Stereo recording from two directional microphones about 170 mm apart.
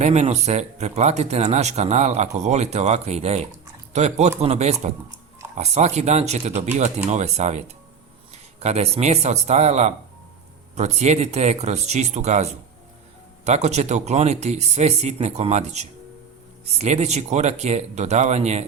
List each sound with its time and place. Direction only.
0.0 s speech: 40° right (ahead or behind)